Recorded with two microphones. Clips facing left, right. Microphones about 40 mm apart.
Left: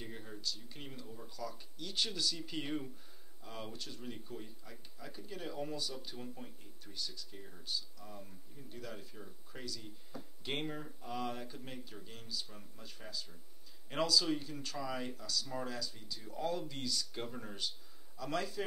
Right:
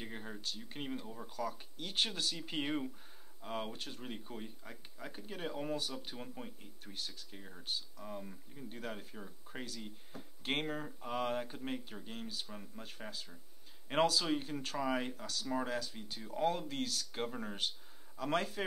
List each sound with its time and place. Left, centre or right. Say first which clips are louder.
0.0 s speech: right 1 dB; right
17.6 s speech: right 3 dB; right